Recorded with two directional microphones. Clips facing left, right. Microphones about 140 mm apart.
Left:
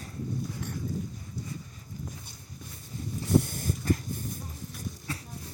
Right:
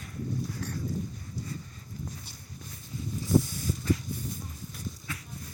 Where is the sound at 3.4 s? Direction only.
55° left (ahead or behind).